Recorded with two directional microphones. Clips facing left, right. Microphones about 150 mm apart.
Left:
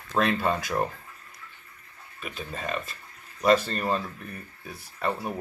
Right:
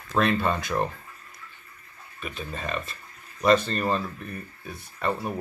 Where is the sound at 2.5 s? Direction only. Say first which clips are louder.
Left 1 dB; 10° left (ahead or behind).